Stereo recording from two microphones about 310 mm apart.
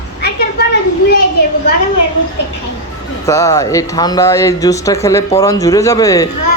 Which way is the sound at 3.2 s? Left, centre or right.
Centre.